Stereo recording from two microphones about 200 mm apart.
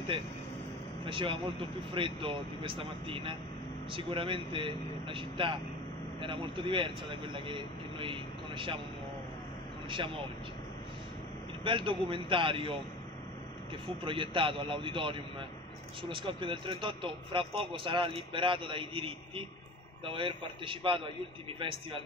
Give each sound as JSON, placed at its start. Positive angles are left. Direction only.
{"t": 1.0, "sound": "speech", "side_deg": -25}
{"t": 9.8, "sound": "speech", "side_deg": -25}
{"t": 11.6, "sound": "speech", "side_deg": -25}
{"t": 14.0, "sound": "speech", "side_deg": -25}